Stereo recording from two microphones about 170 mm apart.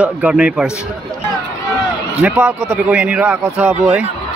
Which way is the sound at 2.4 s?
10° right (ahead or behind).